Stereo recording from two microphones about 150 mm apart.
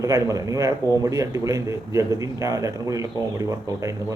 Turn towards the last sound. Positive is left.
turn(degrees=-20)  # may be behind; listen again after turning